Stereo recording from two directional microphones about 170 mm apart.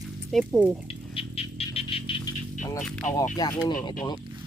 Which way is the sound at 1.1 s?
35° left (ahead or behind).